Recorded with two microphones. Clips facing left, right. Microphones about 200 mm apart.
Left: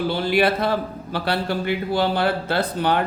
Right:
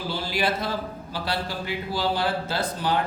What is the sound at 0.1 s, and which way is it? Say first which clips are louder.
A man's voice: left 5 dB; 60° left (ahead or behind).